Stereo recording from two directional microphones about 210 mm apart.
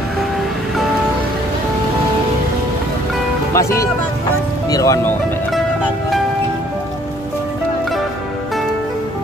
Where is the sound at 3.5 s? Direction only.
15° left (ahead or behind).